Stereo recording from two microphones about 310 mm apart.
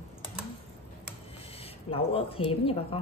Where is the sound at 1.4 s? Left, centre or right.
Centre.